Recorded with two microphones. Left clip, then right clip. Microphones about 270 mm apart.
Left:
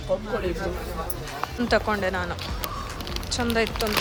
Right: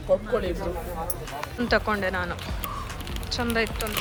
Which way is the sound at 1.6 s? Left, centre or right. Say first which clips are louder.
Left 1 dB; centre.